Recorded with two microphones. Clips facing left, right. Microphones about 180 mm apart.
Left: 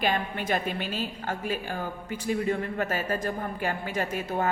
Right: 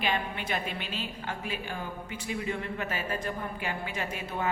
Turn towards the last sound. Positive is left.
turn(degrees=45)  # may be behind; listen again after turning